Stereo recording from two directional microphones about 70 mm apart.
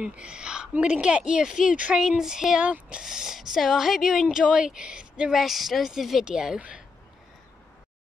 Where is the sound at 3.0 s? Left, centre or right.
Centre.